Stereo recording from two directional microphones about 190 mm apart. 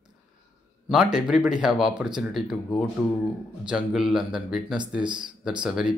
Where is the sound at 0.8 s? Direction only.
5° right (ahead or behind).